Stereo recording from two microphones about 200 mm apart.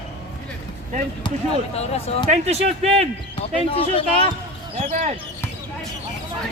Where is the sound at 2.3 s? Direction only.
30° right (ahead or behind).